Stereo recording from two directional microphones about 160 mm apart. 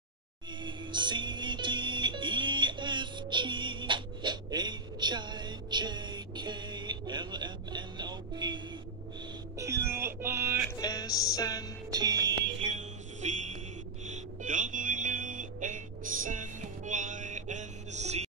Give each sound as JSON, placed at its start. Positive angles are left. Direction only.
{"t": 0.6, "sound": "music", "side_deg": -30}
{"t": 9.6, "sound": "music", "side_deg": -15}
{"t": 10.8, "sound": "music", "side_deg": 25}
{"t": 11.9, "sound": "music", "side_deg": -25}
{"t": 12.5, "sound": "music", "side_deg": -45}